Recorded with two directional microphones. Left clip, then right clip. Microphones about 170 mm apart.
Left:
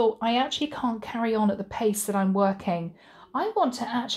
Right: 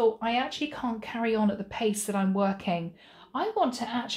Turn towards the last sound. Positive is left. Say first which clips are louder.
# left 2 dB
turn(degrees=35)  # may be behind; listen again after turning